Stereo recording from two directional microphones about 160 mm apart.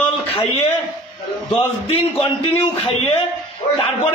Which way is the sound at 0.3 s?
35° left (ahead or behind).